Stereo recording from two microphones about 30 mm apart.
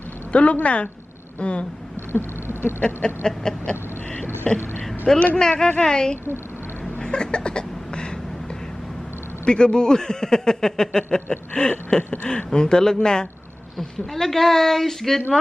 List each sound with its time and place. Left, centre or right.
0.3 s a woman's voice: left
3.0 s a man's voice: left
3.7 s a sound: left
5.1 s speech: centre
5.4 s a man's voice: left
7.0 s a sound: left
9.5 s a man's voice: left
13.7 s speech: centre